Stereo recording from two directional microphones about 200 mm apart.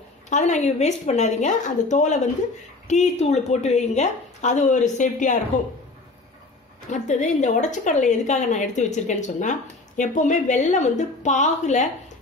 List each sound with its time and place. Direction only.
0.3 s a woman's voice: 35° left (ahead or behind)
6.9 s a woman's voice: 35° left (ahead or behind)